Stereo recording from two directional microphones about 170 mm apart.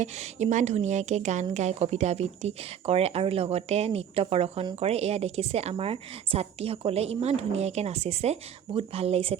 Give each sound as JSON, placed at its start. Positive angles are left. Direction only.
{"t": 0.0, "sound": "speech", "side_deg": -45}